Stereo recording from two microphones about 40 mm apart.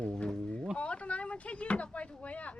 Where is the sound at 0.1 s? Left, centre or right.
Centre.